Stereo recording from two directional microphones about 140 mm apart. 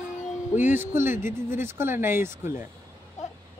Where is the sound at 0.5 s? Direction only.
15° right (ahead or behind).